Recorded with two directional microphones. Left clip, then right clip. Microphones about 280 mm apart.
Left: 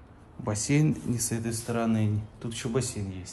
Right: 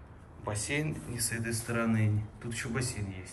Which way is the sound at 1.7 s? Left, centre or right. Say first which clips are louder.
Left 4 dB; centre.